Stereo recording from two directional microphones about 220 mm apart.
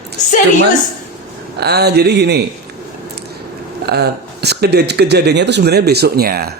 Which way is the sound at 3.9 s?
45° right (ahead or behind).